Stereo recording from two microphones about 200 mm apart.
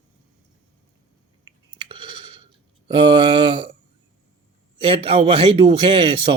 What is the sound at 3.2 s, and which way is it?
Speech, 25° right (ahead or behind).